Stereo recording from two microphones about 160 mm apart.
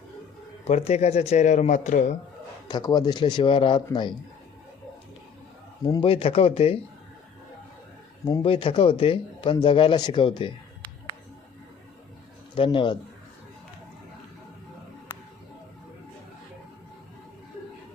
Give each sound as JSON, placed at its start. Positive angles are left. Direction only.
{"t": 0.7, "sound": "speech", "side_deg": 45}
{"t": 2.6, "sound": "speech", "side_deg": 25}
{"t": 5.8, "sound": "speech", "side_deg": 30}
{"t": 8.4, "sound": "speech", "side_deg": 35}
{"t": 12.5, "sound": "speech", "side_deg": 30}